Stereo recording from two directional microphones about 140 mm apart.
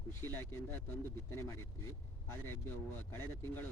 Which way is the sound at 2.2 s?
15° left (ahead or behind).